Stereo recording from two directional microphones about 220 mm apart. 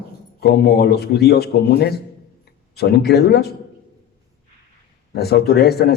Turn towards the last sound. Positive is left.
turn(degrees=45)  # may be behind; listen again after turning